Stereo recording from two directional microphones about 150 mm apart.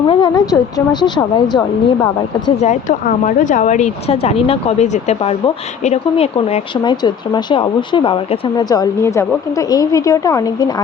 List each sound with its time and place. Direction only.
0.1 s speech: 25° left (ahead or behind)
3.2 s speech: 60° left (ahead or behind); by 6.9 s 40° left (ahead or behind)
7.0 s speech: 30° left (ahead or behind)